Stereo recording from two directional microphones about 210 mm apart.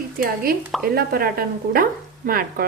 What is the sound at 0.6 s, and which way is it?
Speech, 5° right (ahead or behind).